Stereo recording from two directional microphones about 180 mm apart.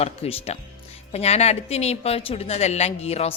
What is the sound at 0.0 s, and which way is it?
A man's voice, 35° left (ahead or behind).